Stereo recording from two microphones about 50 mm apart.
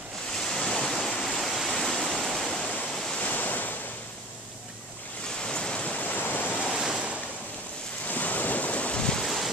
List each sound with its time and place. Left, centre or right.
0.4 s waterfall: centre
3.2 s waves: left
5.4 s a sound: centre; by 6.6 s left
6.7 s waves: centre
8.1 s waves: left
9.2 s waves: centre